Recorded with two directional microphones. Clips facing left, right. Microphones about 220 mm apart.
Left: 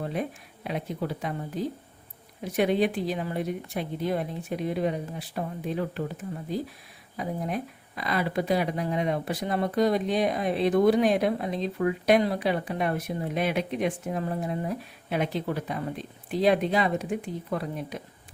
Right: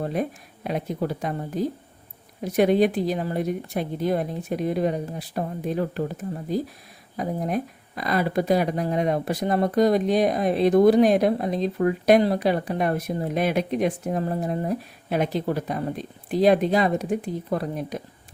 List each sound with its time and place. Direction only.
0.0 s speech: 45° right (ahead or behind)